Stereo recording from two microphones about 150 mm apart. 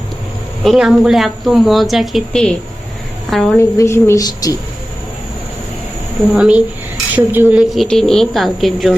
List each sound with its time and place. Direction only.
0.6 s speech: centre (ahead or behind)
3.6 s a woman's voice: 20° left (ahead or behind)
6.3 s a woman's voice: 5° right (ahead or behind)